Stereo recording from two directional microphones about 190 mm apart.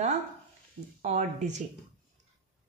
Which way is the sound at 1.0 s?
40° right (ahead or behind).